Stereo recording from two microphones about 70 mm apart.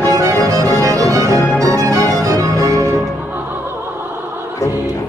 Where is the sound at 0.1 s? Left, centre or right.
Right.